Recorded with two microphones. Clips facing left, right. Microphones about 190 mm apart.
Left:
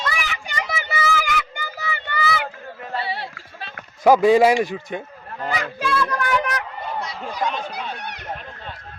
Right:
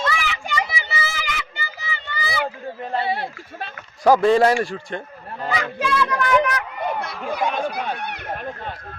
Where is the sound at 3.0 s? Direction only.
50° right (ahead or behind).